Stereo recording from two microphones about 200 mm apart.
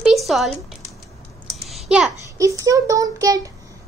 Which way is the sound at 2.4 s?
15° right (ahead or behind).